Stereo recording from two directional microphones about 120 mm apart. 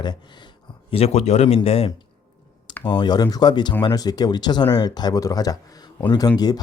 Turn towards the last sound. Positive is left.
turn(degrees=35)  # may be behind; listen again after turning